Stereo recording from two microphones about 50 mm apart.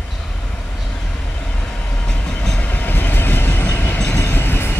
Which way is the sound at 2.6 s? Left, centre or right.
Left.